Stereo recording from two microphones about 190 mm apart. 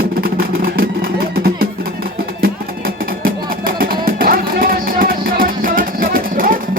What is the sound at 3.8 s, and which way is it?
Music, 50° right (ahead or behind).